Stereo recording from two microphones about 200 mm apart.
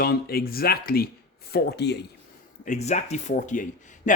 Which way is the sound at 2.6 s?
35° left (ahead or behind).